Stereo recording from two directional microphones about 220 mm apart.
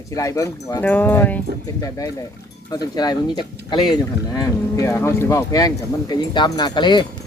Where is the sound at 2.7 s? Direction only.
20° left (ahead or behind).